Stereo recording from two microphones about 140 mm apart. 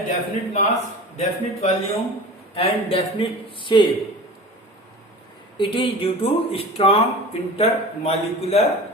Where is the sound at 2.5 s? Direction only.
40° left (ahead or behind).